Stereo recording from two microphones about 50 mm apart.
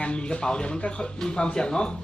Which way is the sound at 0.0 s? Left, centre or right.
Left.